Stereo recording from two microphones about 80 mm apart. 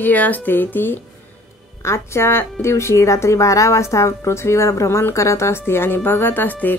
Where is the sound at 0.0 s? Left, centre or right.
Centre.